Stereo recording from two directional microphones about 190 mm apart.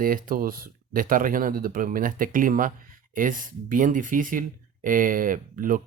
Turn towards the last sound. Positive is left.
turn(degrees=-45)  # may be behind; listen again after turning